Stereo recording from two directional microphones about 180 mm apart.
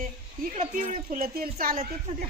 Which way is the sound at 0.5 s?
40° right (ahead or behind).